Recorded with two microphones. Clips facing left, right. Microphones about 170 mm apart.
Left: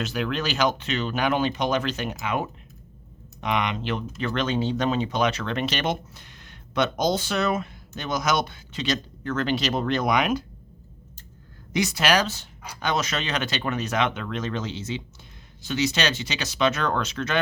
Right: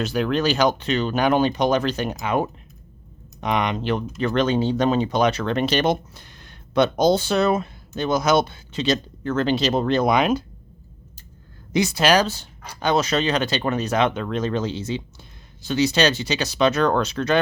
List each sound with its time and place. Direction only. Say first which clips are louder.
0.0 s speech: right 6 dB; 35° right (ahead or behind)
11.7 s speech: right 4 dB; 30° right (ahead or behind)